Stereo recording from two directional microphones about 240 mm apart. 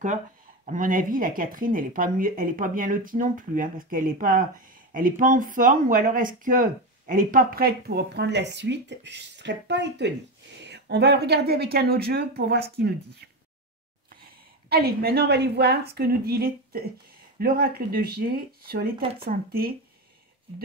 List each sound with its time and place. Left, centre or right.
0.7 s speech: right
14.7 s speech: right